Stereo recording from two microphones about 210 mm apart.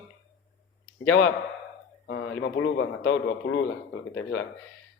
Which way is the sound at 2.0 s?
60° left (ahead or behind).